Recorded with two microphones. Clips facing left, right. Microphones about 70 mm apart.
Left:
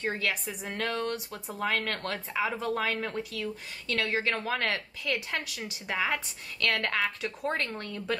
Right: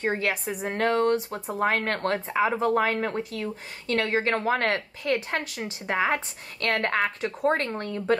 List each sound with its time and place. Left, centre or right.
0.1 s speech: right